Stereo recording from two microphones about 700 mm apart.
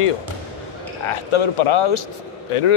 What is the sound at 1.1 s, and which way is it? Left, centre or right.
A man's voice, left.